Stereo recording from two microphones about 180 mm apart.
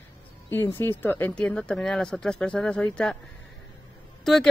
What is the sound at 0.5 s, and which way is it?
Speech, 15° left (ahead or behind).